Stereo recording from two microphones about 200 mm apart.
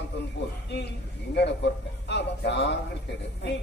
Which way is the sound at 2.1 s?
60° left (ahead or behind).